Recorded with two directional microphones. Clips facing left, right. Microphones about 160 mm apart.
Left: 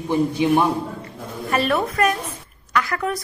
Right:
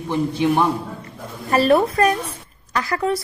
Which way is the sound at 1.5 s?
35° right (ahead or behind).